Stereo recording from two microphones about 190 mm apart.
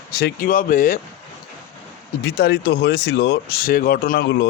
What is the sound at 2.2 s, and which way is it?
A man's voice, 60° left (ahead or behind).